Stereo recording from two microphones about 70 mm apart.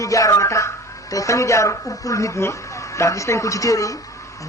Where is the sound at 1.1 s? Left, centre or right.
Left.